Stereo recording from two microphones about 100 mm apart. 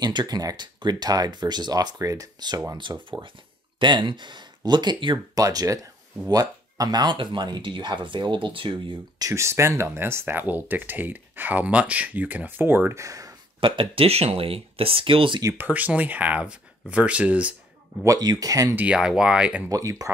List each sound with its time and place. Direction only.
0.0 s speech: 45° right (ahead or behind)
2.8 s speech: 55° right (ahead or behind)
5.4 s speech: 35° right (ahead or behind); by 8.9 s 55° right (ahead or behind)
9.2 s speech: 30° right (ahead or behind)
13.6 s speech: 60° right (ahead or behind)
15.5 s speech: 15° right (ahead or behind)
18.0 s speech: 40° right (ahead or behind)
18.9 s speech: 10° right (ahead or behind)
19.7 s speech: 35° right (ahead or behind)